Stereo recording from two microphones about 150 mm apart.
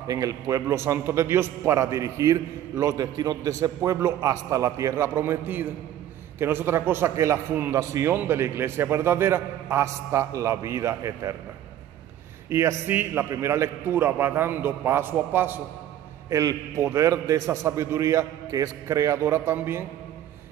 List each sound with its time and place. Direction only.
0.1 s a man's voice: 25° right (ahead or behind)
12.4 s a man's voice: 15° right (ahead or behind)